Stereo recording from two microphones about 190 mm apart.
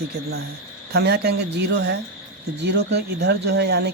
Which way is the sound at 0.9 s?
60° right (ahead or behind).